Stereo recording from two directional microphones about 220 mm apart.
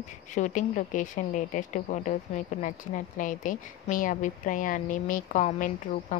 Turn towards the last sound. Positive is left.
turn(degrees=35)  # may be behind; listen again after turning